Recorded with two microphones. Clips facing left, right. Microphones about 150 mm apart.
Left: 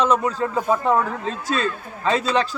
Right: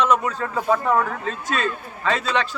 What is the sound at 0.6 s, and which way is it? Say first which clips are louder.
Speech: right 1 dB; 20° left (ahead or behind).